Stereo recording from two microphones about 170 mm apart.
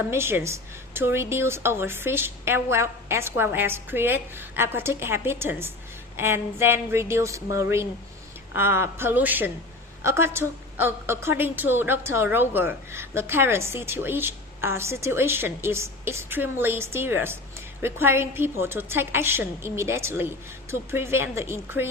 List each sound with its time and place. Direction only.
0.1 s a woman's voice: 15° right (ahead or behind)